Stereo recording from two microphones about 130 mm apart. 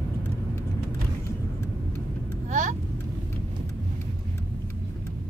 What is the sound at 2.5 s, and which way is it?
Vehicle, 75° right (ahead or behind).